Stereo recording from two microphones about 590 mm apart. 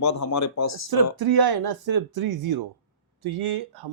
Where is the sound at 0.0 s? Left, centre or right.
Left.